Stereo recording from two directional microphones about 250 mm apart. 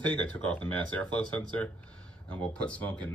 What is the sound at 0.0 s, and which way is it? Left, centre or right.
Speech, centre.